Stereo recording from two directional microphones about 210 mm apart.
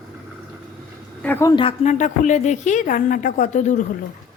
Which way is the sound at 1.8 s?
35° left (ahead or behind).